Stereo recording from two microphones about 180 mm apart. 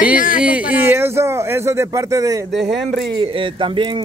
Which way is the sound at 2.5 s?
Centre (ahead or behind).